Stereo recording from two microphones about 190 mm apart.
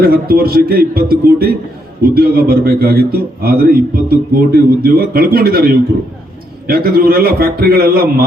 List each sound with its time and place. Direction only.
0.0 s a man's voice: 50° right (ahead or behind)